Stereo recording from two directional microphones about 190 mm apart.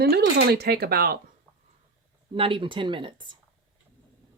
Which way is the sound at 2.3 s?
30° right (ahead or behind).